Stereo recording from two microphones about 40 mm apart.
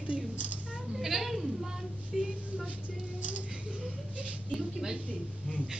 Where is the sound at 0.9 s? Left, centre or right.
Centre.